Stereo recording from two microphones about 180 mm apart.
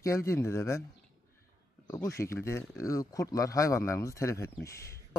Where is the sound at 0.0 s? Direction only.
15° left (ahead or behind).